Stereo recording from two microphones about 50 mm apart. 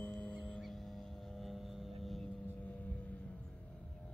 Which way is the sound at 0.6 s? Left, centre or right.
Centre.